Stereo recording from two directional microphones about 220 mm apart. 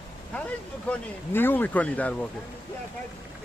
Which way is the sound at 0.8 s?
10° left (ahead or behind).